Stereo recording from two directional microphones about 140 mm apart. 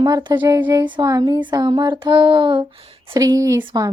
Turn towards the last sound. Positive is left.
turn(degrees=-20)  # may be behind; listen again after turning